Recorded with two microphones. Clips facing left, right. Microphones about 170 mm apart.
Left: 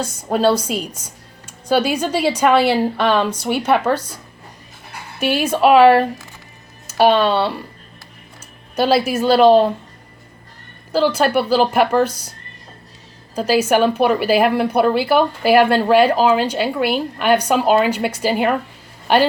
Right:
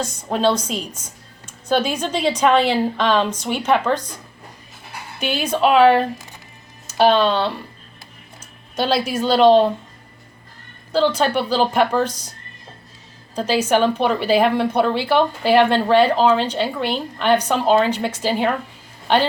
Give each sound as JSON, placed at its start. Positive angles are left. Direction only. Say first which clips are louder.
{"t": 0.0, "sound": "speech", "louder": "left 2 dB", "side_deg": 5}
{"t": 5.2, "sound": "speech", "louder": "left 3 dB", "side_deg": 5}
{"t": 8.7, "sound": "a woman's voice", "louder": "left 4 dB", "side_deg": 5}
{"t": 10.9, "sound": "speech", "louder": "left 2 dB", "side_deg": 10}
{"t": 13.3, "sound": "speech", "louder": "left 2 dB", "side_deg": 10}